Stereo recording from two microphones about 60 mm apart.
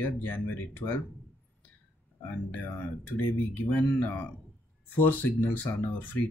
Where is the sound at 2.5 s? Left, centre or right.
Left.